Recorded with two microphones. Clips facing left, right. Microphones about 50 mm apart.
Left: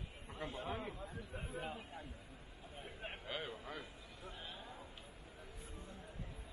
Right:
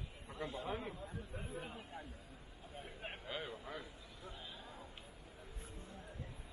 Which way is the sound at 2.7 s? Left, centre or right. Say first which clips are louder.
Even; centre.